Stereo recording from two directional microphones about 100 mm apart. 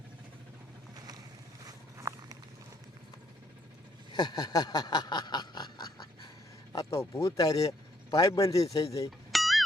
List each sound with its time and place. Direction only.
1.6 s walk: 35° right (ahead or behind)
4.1 s a sound: 45° left (ahead or behind)
7.1 s speech: 35° left (ahead or behind)
9.0 s music: centre (ahead or behind)